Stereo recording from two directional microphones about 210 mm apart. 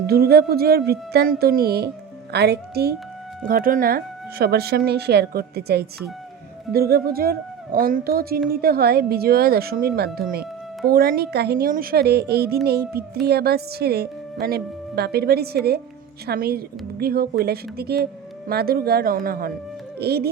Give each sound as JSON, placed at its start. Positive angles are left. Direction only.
{"t": 0.1, "sound": "a woman's voice", "side_deg": -50}